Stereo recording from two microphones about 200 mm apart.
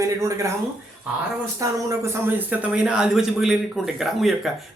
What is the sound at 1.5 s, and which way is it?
Speech, 15° right (ahead or behind).